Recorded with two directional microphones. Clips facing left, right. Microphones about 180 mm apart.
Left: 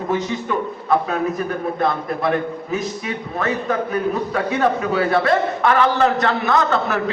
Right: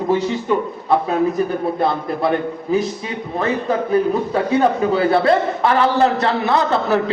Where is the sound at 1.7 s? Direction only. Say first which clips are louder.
Right 2 dB; 30° right (ahead or behind).